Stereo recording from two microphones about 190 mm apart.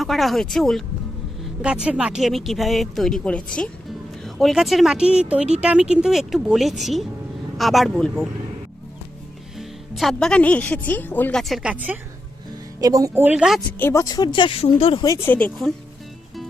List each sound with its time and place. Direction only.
0.0 s speech: centre (ahead or behind)
9.6 s speech: centre (ahead or behind)
12.8 s speech: 20° right (ahead or behind)
13.7 s speech: 10° left (ahead or behind); by 15.0 s 30° left (ahead or behind)
15.0 s speech: 15° left (ahead or behind)